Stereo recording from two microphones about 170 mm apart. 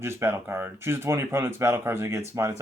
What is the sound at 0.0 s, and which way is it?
Speech, 15° right (ahead or behind).